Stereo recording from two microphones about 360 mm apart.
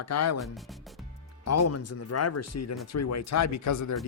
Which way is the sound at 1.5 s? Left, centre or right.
Left.